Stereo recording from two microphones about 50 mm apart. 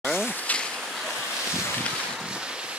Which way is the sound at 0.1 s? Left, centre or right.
Left.